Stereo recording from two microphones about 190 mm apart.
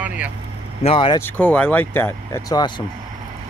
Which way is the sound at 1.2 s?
10° left (ahead or behind).